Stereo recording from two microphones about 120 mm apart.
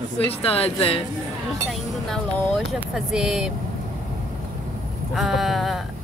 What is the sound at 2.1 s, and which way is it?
Speech, 5° left (ahead or behind).